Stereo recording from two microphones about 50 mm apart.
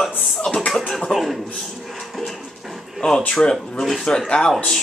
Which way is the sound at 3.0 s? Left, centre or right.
Centre.